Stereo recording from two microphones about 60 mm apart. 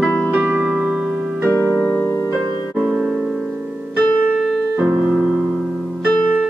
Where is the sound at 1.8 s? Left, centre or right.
Left.